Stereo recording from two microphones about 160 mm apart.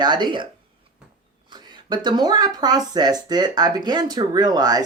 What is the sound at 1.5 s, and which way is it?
Speech, 25° right (ahead or behind).